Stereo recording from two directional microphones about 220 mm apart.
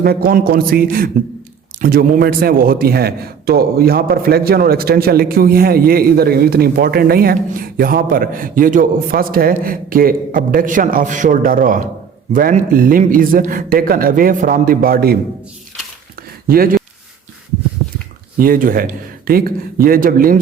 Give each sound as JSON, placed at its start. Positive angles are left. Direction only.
{"t": 0.0, "sound": "a man's voice", "side_deg": -40}
{"t": 16.5, "sound": "a man's voice", "side_deg": -40}
{"t": 18.3, "sound": "a man's voice", "side_deg": -40}